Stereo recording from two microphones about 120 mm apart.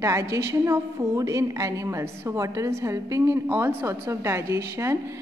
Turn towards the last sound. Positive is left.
turn(degrees=-25)  # may be behind; listen again after turning